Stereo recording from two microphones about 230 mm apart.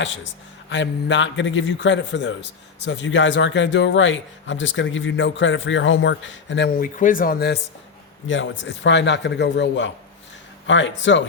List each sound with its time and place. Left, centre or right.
0.7 s a man's voice: left
6.7 s a man's voice: left